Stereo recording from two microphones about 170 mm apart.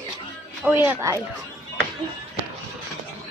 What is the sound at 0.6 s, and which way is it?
Speech, 10° right (ahead or behind).